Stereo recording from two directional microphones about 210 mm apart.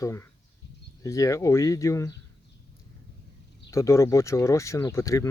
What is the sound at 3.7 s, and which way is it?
Speech, 15° left (ahead or behind).